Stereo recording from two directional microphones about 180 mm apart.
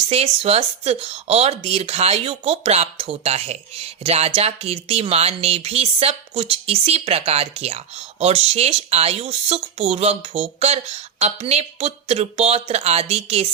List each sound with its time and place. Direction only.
0.1 s speech: 35° right (ahead or behind)